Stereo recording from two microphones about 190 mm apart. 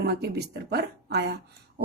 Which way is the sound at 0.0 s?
60° right (ahead or behind).